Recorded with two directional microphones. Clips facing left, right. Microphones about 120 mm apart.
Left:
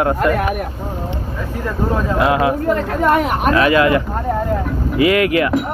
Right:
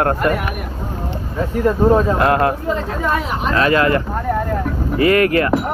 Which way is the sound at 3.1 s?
60° left (ahead or behind).